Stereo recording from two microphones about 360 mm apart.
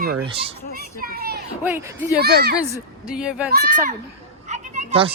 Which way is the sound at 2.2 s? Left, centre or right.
Right.